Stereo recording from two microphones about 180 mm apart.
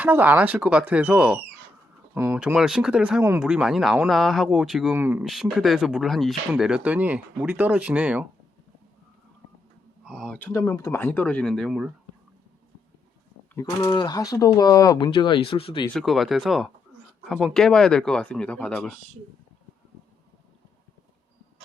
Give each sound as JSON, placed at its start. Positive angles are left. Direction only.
{"t": 0.0, "sound": "speech", "side_deg": -10}
{"t": 4.9, "sound": "speech", "side_deg": -10}
{"t": 5.2, "sound": "speech", "side_deg": 0}
{"t": 10.1, "sound": "speech", "side_deg": 5}
{"t": 13.5, "sound": "speech", "side_deg": 20}
{"t": 15.9, "sound": "speech", "side_deg": 0}